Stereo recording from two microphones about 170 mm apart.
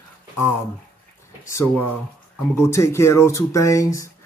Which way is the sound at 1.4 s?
15° left (ahead or behind).